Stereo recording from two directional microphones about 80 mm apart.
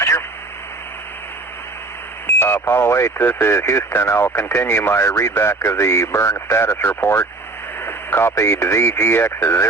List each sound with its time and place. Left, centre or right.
2.2 s speech: left